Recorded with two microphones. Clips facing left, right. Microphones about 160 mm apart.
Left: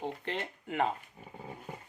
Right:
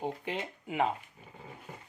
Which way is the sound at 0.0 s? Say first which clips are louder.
Right 1 dB; 5° right (ahead or behind).